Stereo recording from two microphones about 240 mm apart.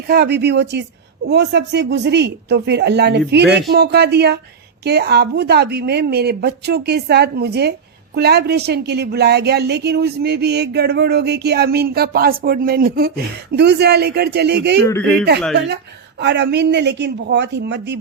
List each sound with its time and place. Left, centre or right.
0.1 s a woman's voice: right
14.8 s a man's voice: centre
15.5 s a woman's voice: right